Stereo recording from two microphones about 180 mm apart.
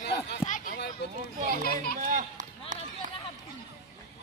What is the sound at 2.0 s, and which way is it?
Run, 45° right (ahead or behind).